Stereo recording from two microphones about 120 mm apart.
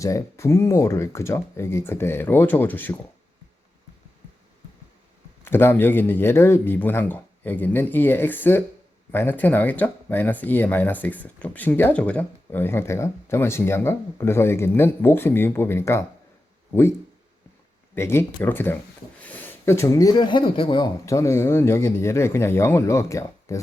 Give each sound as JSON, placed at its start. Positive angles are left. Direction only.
{"t": 0.0, "sound": "speech", "side_deg": 25}
{"t": 5.4, "sound": "speech", "side_deg": 20}
{"t": 17.9, "sound": "speech", "side_deg": 20}
{"t": 21.0, "sound": "speech", "side_deg": 25}